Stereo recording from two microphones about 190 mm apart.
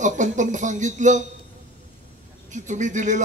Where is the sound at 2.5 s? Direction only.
40° right (ahead or behind).